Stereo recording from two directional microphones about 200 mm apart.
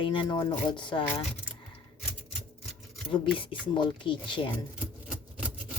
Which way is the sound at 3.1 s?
25° left (ahead or behind).